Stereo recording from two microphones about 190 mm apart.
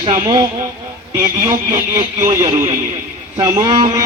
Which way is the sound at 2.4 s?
25° right (ahead or behind).